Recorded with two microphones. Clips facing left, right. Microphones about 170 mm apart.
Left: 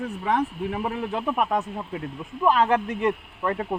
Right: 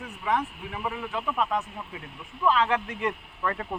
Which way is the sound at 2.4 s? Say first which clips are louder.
Left 4 dB; 45° left (ahead or behind).